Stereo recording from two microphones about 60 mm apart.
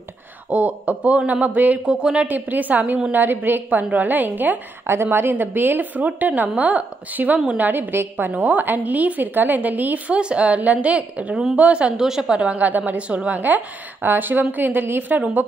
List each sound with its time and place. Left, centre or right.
0.5 s a woman's voice: right
2.2 s a woman's voice: right
4.8 s a woman's voice: right
12.0 s a woman's voice: centre; by 15.4 s right